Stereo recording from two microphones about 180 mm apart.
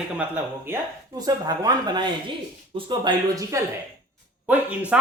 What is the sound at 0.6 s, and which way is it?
Speech, 15° right (ahead or behind).